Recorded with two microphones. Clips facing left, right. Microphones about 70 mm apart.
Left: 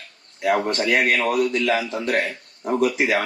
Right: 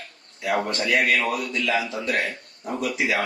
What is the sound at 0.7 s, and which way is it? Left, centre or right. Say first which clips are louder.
A man's voice: left 2 dB; left.